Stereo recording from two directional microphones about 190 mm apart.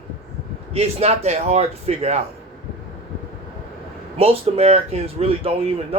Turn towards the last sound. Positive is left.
turn(degrees=-30)  # may be behind; listen again after turning